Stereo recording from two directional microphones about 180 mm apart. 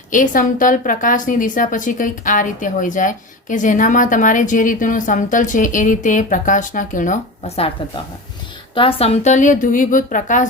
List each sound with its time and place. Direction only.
0.1 s a woman's voice: 45° left (ahead or behind)
8.7 s a woman's voice: 30° left (ahead or behind); by 10.4 s 45° left (ahead or behind)